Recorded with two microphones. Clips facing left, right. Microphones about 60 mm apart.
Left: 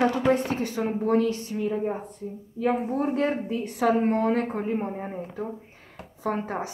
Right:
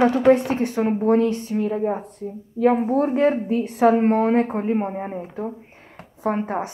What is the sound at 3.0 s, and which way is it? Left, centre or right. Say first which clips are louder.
Speech: right 5 dB; right.